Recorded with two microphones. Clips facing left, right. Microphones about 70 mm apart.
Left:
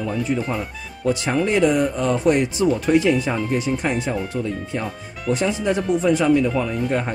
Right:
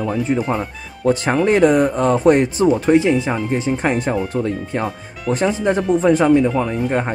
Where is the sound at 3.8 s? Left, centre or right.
Right.